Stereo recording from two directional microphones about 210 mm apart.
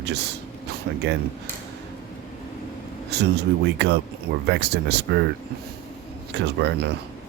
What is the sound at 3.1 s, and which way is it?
Speech, 50° right (ahead or behind).